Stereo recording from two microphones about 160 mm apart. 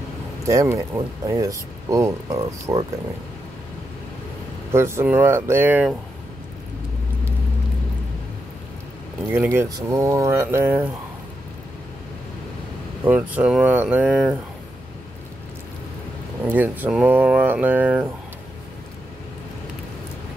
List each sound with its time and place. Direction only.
0.5 s speech: 20° right (ahead or behind)
4.7 s speech: 15° right (ahead or behind)
9.3 s speech: 15° right (ahead or behind)
13.0 s speech: 10° right (ahead or behind)
16.4 s speech: 10° right (ahead or behind)